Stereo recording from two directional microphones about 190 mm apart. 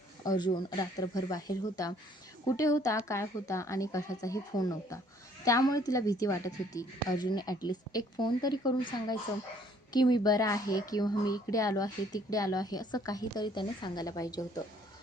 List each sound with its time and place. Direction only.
0.3 s a woman's voice: 20° left (ahead or behind)